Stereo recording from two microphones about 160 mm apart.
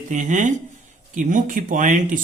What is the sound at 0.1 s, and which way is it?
Speech, 50° right (ahead or behind).